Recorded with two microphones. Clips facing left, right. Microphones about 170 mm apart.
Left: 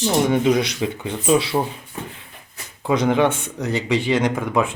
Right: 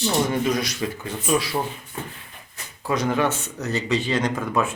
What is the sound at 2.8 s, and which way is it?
Speech, 20° left (ahead or behind).